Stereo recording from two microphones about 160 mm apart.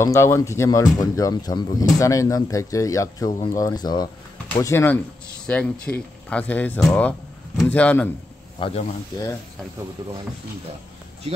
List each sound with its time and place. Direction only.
0.0 s speech: 15° left (ahead or behind)
8.5 s speech: 30° left (ahead or behind)